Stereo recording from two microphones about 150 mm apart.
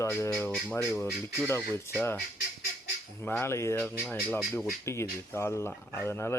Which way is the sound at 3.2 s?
15° left (ahead or behind).